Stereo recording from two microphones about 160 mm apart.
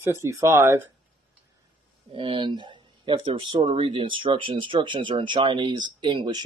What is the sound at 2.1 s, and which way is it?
Speech, 30° right (ahead or behind).